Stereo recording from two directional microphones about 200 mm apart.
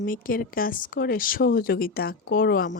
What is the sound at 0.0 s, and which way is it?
Speech, 45° left (ahead or behind).